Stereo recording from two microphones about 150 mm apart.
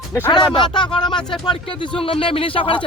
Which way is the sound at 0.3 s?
30° left (ahead or behind).